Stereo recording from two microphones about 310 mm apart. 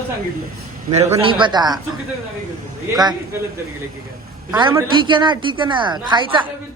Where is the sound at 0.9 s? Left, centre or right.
Centre.